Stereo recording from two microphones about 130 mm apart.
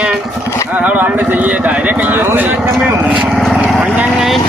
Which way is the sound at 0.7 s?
10° right (ahead or behind).